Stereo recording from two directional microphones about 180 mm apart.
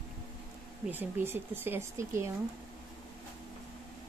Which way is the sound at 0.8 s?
10° right (ahead or behind).